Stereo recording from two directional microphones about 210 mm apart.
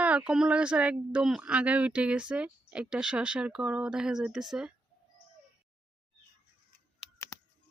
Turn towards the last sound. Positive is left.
turn(degrees=15)  # may be behind; listen again after turning